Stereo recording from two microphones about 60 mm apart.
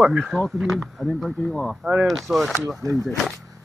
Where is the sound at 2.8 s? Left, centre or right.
Right.